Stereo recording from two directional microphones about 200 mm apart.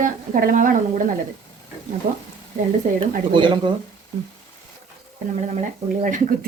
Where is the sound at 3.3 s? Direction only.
25° right (ahead or behind).